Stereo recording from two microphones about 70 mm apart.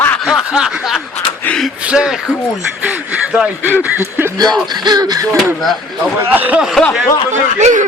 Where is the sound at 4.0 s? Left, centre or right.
Right.